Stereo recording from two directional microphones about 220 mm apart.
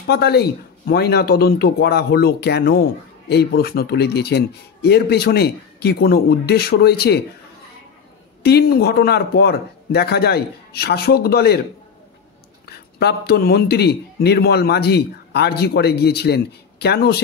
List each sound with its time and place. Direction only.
0.0 s speech: 45° left (ahead or behind)
8.4 s speech: 45° left (ahead or behind)
12.6 s speech: 45° left (ahead or behind)